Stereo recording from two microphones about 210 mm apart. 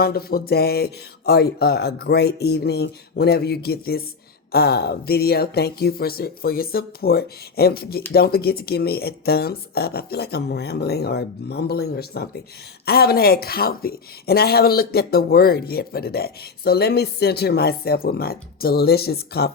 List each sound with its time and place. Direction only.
0.0 s speech: 45° left (ahead or behind)